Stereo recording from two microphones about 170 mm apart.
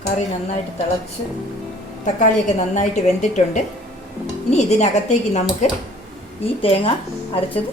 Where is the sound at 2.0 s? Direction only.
45° left (ahead or behind).